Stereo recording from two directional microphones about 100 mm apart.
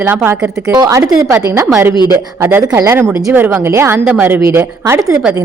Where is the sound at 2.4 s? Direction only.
25° right (ahead or behind).